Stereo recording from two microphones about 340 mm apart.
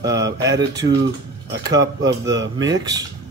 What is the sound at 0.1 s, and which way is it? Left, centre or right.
Speech, right.